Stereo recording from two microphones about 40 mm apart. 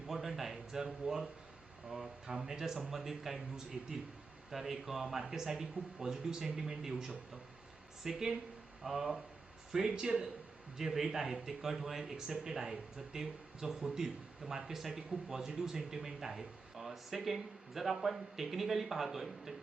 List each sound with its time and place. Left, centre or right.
0.1 s a sound: centre
1.9 s speech: centre
9.7 s speech: centre
10.8 s speech: centre